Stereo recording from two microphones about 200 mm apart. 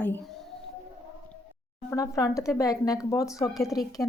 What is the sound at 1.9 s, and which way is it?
Speech, 15° left (ahead or behind).